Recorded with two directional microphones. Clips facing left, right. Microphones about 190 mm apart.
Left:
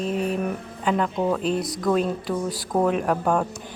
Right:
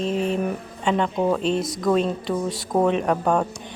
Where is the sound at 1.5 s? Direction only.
25° right (ahead or behind).